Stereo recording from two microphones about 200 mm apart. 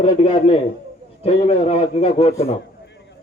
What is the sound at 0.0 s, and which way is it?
A man's voice, 30° left (ahead or behind).